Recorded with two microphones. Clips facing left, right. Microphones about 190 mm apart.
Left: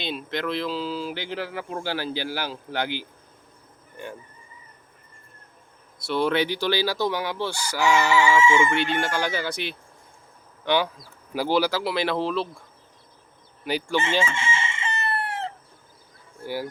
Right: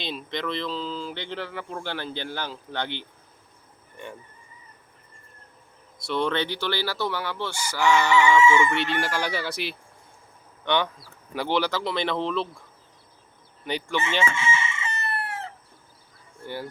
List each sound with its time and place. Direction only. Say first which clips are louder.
0.0 s speech: left 2 dB; 5° left (ahead or behind)
6.0 s speech: left 3 dB; 5° left (ahead or behind)
13.7 s speech: left 3 dB; 5° left (ahead or behind)
14.2 s chicken: even; 30° left (ahead or behind)
16.4 s speech: left 4 dB; 10° left (ahead or behind)